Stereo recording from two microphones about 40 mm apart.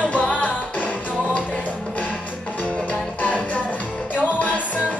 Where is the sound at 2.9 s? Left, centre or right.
Left.